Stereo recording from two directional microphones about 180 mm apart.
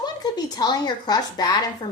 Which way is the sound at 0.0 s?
20° left (ahead or behind).